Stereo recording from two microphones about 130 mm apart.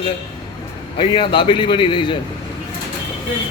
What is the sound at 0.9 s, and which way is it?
A man's voice, 40° left (ahead or behind).